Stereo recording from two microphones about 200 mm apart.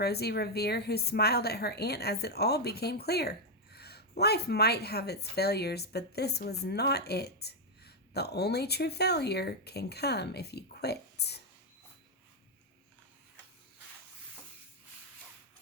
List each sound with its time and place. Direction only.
0.0 s a woman's voice: 55° left (ahead or behind)